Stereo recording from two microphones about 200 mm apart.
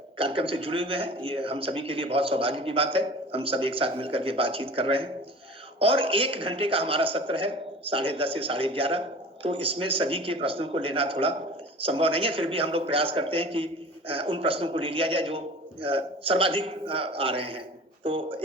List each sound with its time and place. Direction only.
0.2 s a man's voice: 25° right (ahead or behind)